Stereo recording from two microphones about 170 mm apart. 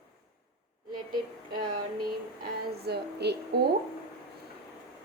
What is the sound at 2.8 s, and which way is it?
Speech, 75° right (ahead or behind).